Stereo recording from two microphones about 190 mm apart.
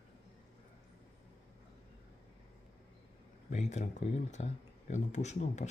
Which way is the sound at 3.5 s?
40° left (ahead or behind).